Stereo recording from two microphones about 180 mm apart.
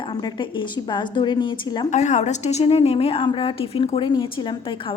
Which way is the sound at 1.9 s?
40° left (ahead or behind).